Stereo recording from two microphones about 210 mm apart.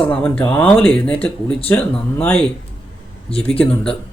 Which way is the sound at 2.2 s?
5° left (ahead or behind).